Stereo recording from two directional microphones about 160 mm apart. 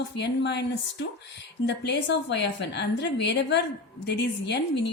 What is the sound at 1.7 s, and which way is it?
A woman's voice, 90° left.